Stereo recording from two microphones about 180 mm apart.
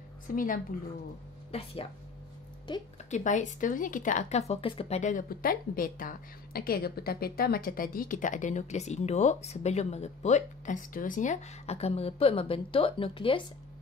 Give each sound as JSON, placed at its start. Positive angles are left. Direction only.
{"t": 0.3, "sound": "speech", "side_deg": 50}
{"t": 1.5, "sound": "speech", "side_deg": 35}
{"t": 3.1, "sound": "speech", "side_deg": 45}